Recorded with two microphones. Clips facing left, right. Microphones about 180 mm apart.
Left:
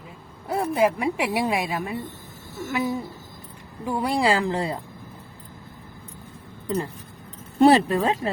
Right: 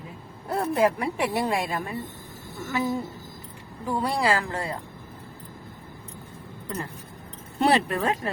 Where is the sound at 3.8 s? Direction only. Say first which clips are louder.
Left 2 dB; 20° left (ahead or behind).